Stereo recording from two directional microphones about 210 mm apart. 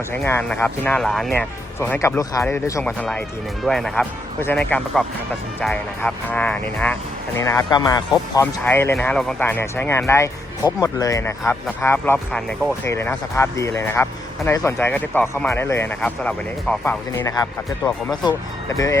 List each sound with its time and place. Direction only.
0.1 s speech: 10° left (ahead or behind)